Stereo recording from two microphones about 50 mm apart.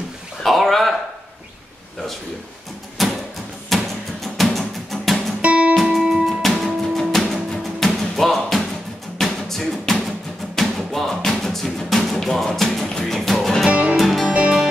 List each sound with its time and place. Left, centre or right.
0.4 s a sound: centre
3.0 s a sound: centre
3.7 s music: centre
5.4 s music: right
6.2 s music: centre
13.7 s music: right
13.9 s music: centre
14.3 s music: right